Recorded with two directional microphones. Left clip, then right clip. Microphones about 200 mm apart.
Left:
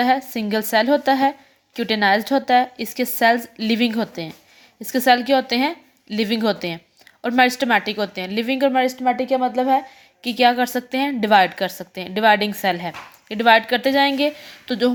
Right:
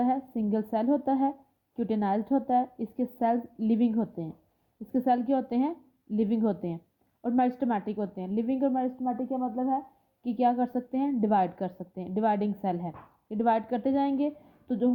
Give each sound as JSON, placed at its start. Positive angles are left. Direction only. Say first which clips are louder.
{"t": 0.0, "sound": "a woman's voice", "louder": "left 10 dB", "side_deg": 10}
{"t": 9.0, "sound": "a woman's voice", "louder": "left 13 dB", "side_deg": 65}
{"t": 10.2, "sound": "a woman's voice", "louder": "left 10 dB", "side_deg": 5}